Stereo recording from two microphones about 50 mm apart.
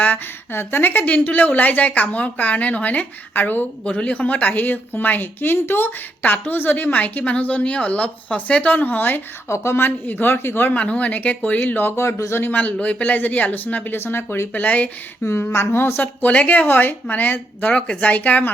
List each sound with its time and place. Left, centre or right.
0.0 s a woman's voice: left
3.8 s a woman's voice: left
9.5 s speech: left
9.8 s speech: left
10.7 s a woman's voice: left
11.9 s speech: left
12.5 s a woman's voice: left
13.9 s speech: left
15.4 s speech: left
16.2 s a woman's voice: left
17.7 s a woman's voice: left